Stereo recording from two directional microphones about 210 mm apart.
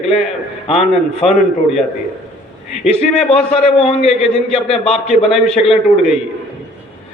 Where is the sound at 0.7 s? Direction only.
30° left (ahead or behind).